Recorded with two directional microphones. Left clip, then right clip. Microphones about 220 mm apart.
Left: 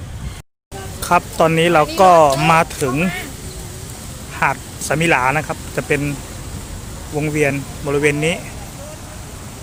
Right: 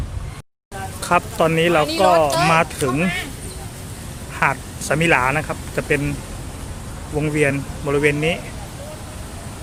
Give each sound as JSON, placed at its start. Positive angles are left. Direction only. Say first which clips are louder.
{"t": 1.0, "sound": "speech", "louder": "left 3 dB", "side_deg": 15}
{"t": 2.5, "sound": "speech", "louder": "left 3 dB", "side_deg": 10}
{"t": 4.4, "sound": "speech", "louder": "left 1 dB", "side_deg": 10}
{"t": 7.2, "sound": "speech", "louder": "left 1 dB", "side_deg": 5}